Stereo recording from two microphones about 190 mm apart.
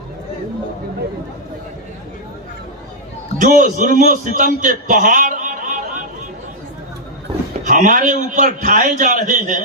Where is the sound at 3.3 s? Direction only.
40° right (ahead or behind).